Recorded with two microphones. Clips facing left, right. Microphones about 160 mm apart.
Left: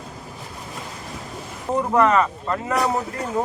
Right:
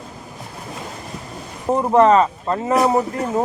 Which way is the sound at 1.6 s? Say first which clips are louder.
Right 5 dB; 30° right (ahead or behind).